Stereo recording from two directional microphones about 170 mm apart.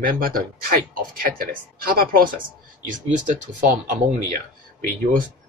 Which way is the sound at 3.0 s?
45° right (ahead or behind).